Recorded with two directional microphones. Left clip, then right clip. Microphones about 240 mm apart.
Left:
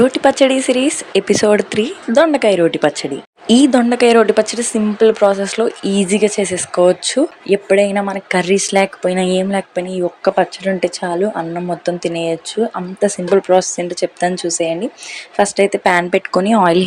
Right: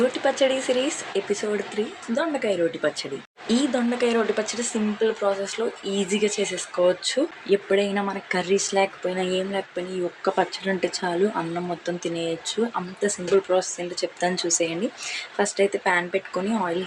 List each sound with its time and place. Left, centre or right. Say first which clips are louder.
0.1 s speech: left 10 dB; left
10.2 s speech: left 9 dB; left